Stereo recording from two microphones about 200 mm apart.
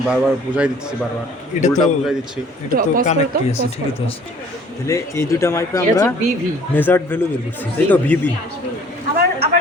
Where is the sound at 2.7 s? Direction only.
45° right (ahead or behind).